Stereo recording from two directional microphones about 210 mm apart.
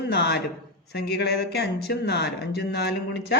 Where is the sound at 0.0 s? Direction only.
55° left (ahead or behind).